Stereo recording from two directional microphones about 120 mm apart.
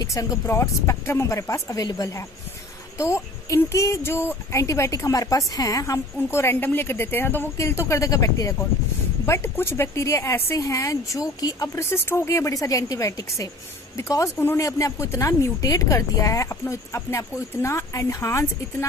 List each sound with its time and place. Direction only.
0.0 s speech: 25° left (ahead or behind)